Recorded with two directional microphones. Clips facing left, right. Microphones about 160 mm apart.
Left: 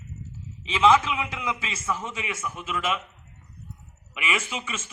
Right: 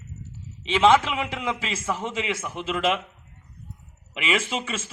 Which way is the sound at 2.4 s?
70° right (ahead or behind).